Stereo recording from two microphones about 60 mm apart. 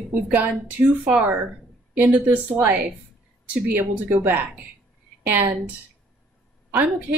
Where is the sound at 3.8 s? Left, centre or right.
Right.